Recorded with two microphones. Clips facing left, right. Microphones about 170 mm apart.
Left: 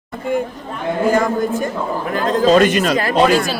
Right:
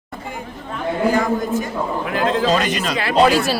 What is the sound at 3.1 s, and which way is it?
Speech, centre (ahead or behind).